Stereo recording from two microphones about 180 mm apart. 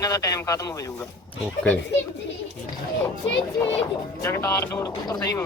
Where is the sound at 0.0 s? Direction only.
20° left (ahead or behind).